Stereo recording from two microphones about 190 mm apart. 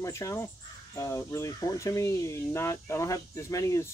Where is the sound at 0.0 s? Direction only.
15° left (ahead or behind).